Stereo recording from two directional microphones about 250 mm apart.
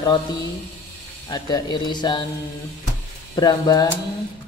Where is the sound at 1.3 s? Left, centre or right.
Centre.